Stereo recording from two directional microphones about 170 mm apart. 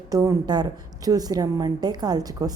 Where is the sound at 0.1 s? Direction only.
20° right (ahead or behind).